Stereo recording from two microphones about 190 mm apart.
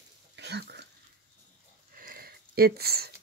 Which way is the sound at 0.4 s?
60° right (ahead or behind).